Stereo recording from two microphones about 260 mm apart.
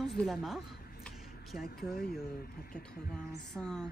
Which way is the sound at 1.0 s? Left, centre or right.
Centre.